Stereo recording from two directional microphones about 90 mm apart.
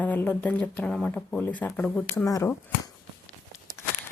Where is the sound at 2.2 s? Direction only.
40° left (ahead or behind).